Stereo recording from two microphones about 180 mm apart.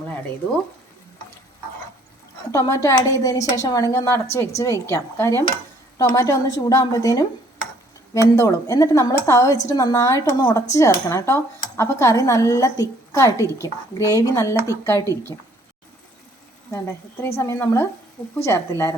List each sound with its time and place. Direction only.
2.5 s a woman's voice: 15° left (ahead or behind)
16.7 s speech: 15° left (ahead or behind)